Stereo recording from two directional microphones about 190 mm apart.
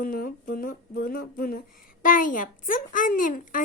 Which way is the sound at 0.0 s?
45° left (ahead or behind).